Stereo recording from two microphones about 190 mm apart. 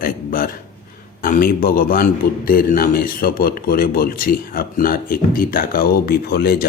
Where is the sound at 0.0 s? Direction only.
50° left (ahead or behind).